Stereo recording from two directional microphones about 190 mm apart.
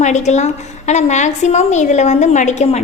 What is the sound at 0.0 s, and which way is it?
A woman's voice, 40° left (ahead or behind).